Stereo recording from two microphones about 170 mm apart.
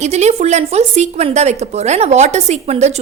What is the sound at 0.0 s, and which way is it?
A woman's voice, 40° right (ahead or behind).